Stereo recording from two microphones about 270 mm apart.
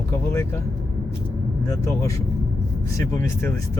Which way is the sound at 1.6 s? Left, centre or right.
Centre.